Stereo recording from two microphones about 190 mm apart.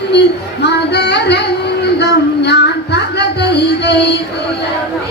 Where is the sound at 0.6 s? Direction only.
60° left (ahead or behind).